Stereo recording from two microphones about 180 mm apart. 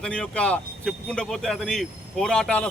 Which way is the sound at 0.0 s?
5° left (ahead or behind).